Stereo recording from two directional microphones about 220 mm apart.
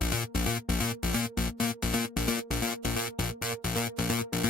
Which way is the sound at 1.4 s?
40° left (ahead or behind).